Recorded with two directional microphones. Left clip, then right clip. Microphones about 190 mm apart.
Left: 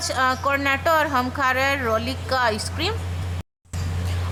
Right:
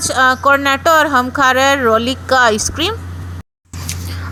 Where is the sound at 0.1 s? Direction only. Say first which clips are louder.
Right 10 dB; 25° right (ahead or behind).